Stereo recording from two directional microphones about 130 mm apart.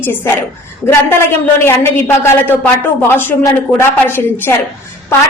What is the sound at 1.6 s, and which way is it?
A woman's voice, 20° left (ahead or behind).